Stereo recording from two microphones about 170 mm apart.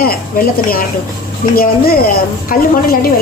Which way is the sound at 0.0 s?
60° left (ahead or behind).